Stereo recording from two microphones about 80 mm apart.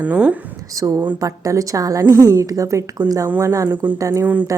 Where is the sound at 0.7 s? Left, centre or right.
Right.